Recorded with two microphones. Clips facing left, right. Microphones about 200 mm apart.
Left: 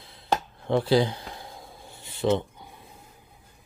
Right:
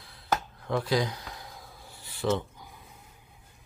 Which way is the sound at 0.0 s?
25° left (ahead or behind).